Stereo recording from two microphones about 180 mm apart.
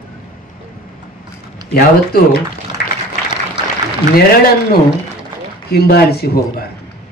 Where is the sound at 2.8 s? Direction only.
60° left (ahead or behind).